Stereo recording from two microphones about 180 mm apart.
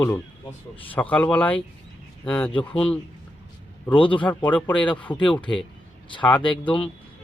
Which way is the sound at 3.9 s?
30° left (ahead or behind).